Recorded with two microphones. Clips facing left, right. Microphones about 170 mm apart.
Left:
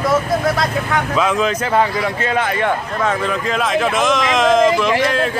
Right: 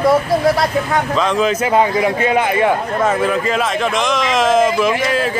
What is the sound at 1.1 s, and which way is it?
A man's voice, centre (ahead or behind).